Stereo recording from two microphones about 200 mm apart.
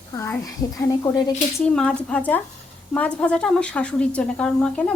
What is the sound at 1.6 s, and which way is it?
Speech, 5° left (ahead or behind).